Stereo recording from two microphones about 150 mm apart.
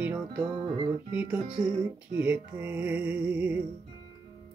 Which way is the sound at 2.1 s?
10° right (ahead or behind).